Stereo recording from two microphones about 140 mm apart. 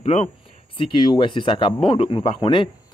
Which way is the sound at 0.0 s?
45° left (ahead or behind).